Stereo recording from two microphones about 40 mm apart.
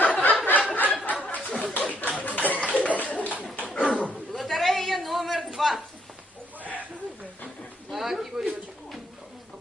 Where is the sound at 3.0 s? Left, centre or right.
Left.